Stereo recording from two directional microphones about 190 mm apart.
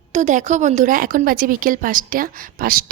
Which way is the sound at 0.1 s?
40° right (ahead or behind).